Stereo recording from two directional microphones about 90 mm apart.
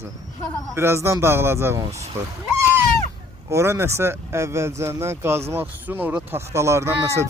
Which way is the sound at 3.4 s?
30° right (ahead or behind).